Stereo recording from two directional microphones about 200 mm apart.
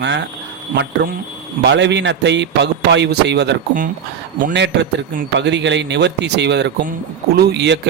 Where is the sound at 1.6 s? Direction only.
60° right (ahead or behind).